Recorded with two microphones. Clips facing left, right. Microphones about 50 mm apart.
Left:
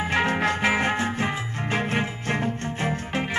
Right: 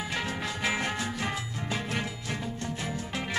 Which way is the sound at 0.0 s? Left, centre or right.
Left.